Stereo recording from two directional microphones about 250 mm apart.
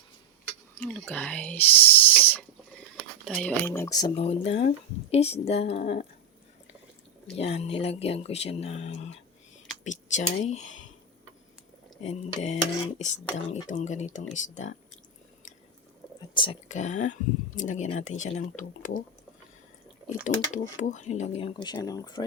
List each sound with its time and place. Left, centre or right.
0.8 s speech: centre; by 6.1 s left
7.3 s speech: left
12.0 s speech: left
16.3 s speech: left
20.2 s speech: left; by 22.2 s centre